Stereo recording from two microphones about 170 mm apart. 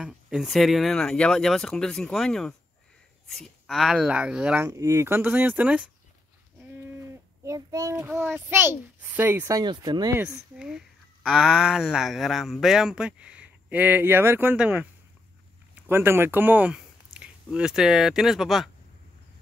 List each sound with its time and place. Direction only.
0.0 s speech: centre (ahead or behind)
4.6 s a child's voice: 20° right (ahead or behind)
7.4 s a child's voice: 20° right (ahead or behind)
10.1 s speech: 5° right (ahead or behind)